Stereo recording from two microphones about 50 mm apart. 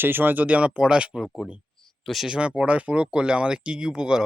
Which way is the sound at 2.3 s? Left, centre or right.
Right.